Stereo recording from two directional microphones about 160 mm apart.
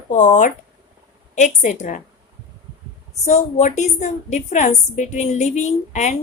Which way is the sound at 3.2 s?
45° left (ahead or behind).